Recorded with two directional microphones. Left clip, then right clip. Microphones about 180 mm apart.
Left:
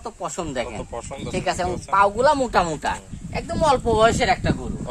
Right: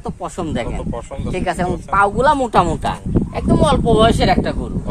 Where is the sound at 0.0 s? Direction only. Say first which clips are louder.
Right 4 dB; 20° right (ahead or behind).